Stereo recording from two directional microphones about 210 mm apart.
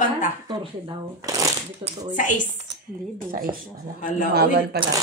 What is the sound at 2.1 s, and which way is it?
Speech, 35° left (ahead or behind).